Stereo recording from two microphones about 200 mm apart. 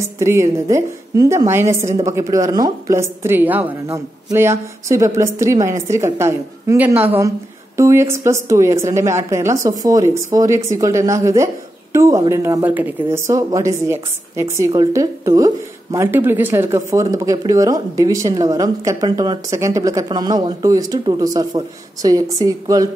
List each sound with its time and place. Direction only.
0.2 s a woman's voice: 15° right (ahead or behind)